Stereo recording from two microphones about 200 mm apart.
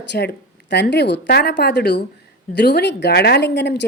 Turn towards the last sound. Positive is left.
turn(degrees=60)  # may be behind; listen again after turning